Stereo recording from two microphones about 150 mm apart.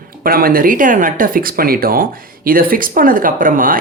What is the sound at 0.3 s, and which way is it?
Speech, 75° right (ahead or behind).